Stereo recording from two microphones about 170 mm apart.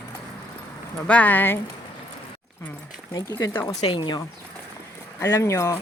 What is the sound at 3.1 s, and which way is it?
Speech, 20° left (ahead or behind).